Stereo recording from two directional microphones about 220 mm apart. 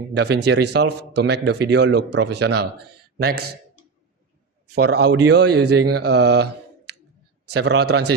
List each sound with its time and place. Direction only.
0.1 s a man's voice: 50° right (ahead or behind)
4.7 s a man's voice: 50° right (ahead or behind)